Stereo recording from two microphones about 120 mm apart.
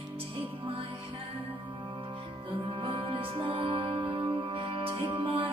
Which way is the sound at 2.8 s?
45° right (ahead or behind).